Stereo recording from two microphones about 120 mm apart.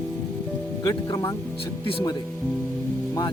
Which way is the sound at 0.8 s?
30° left (ahead or behind).